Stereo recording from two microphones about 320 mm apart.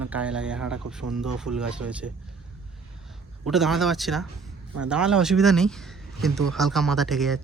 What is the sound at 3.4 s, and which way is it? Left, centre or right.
Speech, centre.